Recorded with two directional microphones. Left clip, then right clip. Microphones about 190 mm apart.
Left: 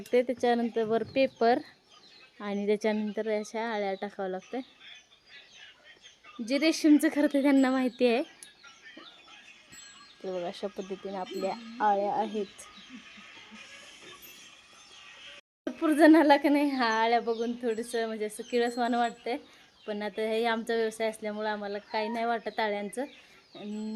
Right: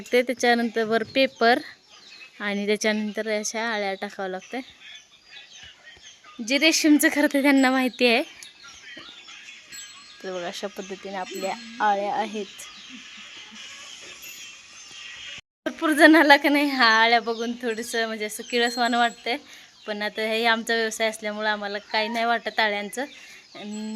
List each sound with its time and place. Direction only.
0.1 s speech: 5° right (ahead or behind)
6.4 s speech: 10° right (ahead or behind)
10.4 s speech: centre (ahead or behind)
10.8 s speech: 15° right (ahead or behind)
11.1 s speech: 5° right (ahead or behind)
15.6 s speech: 5° right (ahead or behind)